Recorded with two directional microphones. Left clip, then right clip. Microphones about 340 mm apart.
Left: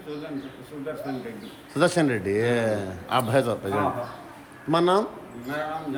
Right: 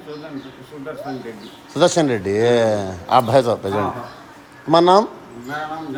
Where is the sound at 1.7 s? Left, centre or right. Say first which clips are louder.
Right 6 dB; centre.